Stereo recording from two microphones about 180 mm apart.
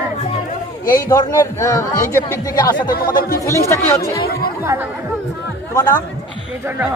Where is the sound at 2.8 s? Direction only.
55° left (ahead or behind).